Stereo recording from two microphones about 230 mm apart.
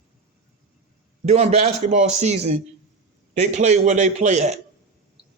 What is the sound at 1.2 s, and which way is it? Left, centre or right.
A man's voice, right.